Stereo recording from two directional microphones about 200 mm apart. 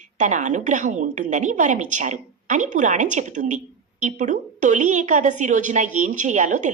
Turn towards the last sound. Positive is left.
turn(degrees=-40)  # may be behind; listen again after turning